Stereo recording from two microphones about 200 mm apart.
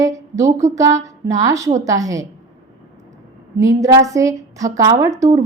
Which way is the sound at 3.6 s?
15° right (ahead or behind).